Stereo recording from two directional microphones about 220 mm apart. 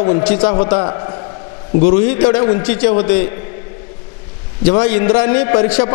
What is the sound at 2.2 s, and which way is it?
Speech, 25° left (ahead or behind).